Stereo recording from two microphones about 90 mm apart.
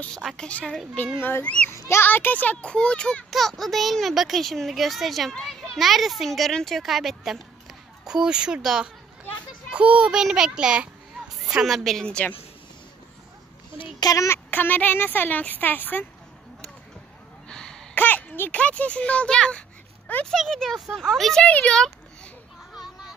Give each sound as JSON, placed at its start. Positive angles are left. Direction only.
{"t": 0.2, "sound": "a child's voice", "side_deg": 0}
{"t": 0.5, "sound": "speech", "side_deg": 15}
{"t": 1.7, "sound": "a child's voice", "side_deg": 30}
{"t": 13.9, "sound": "speech", "side_deg": 40}
{"t": 14.5, "sound": "speech", "side_deg": 20}
{"t": 17.5, "sound": "a sound", "side_deg": 10}
{"t": 17.9, "sound": "a child's voice", "side_deg": 20}
{"t": 22.7, "sound": "children playing", "side_deg": -5}